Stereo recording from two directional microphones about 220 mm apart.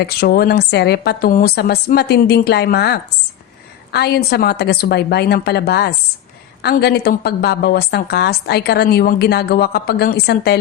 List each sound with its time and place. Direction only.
0.0 s a woman's voice: 45° left (ahead or behind)